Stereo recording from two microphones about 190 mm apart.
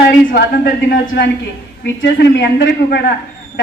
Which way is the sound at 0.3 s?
55° left (ahead or behind).